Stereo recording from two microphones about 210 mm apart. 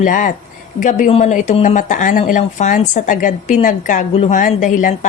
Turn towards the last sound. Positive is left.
turn(degrees=40)  # may be behind; listen again after turning